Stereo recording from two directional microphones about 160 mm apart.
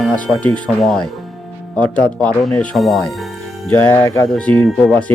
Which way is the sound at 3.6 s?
10° left (ahead or behind).